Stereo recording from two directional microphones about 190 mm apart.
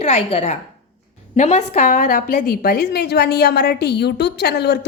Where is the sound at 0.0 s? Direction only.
30° left (ahead or behind).